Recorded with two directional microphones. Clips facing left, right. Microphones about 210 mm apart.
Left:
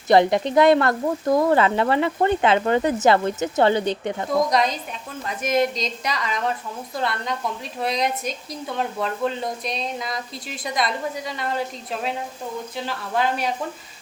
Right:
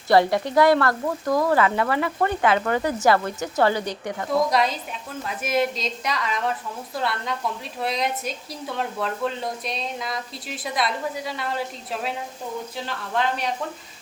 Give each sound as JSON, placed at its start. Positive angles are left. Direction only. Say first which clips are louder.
{"t": 0.1, "sound": "speech", "louder": "left 2 dB", "side_deg": 20}
{"t": 4.4, "sound": "a woman's voice", "louder": "left 1 dB", "side_deg": -5}
{"t": 7.8, "sound": "a woman's voice", "louder": "left 2 dB", "side_deg": 0}